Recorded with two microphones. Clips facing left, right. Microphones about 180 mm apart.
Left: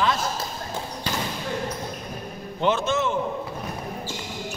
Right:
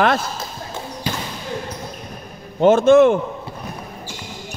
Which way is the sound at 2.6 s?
50° right (ahead or behind).